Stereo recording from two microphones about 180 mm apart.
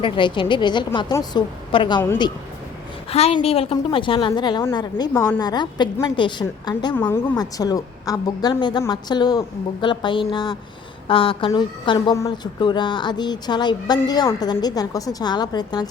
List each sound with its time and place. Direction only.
0.0 s a woman's voice: 25° left (ahead or behind)
3.1 s a woman's voice: 35° left (ahead or behind)